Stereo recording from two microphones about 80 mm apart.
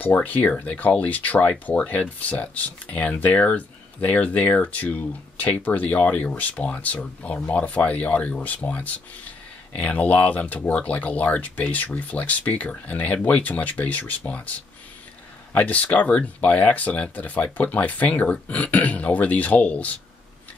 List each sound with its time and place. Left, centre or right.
0.0 s speech: centre